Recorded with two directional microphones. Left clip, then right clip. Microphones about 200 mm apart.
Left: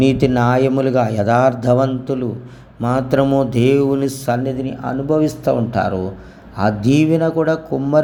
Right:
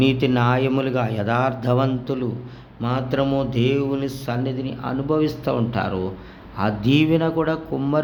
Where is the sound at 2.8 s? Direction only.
25° left (ahead or behind).